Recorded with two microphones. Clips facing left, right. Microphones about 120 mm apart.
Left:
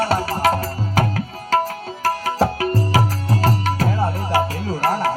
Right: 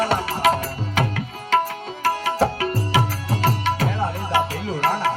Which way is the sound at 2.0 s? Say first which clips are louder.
Left 1 dB; 40° left (ahead or behind).